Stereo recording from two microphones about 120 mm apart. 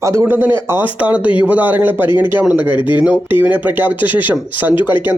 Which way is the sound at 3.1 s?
15° right (ahead or behind).